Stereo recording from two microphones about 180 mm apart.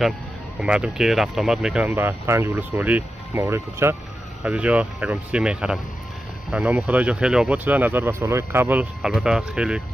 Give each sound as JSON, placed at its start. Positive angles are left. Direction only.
{"t": 0.6, "sound": "speech", "side_deg": -5}